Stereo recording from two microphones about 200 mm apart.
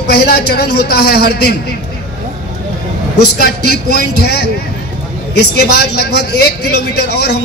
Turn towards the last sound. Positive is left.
turn(degrees=55)  # may be behind; listen again after turning